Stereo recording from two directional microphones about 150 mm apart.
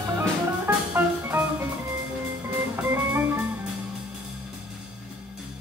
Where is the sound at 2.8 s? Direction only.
15° right (ahead or behind).